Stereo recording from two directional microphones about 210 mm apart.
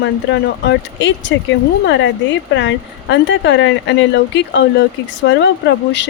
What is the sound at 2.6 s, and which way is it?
Speech, 60° left (ahead or behind).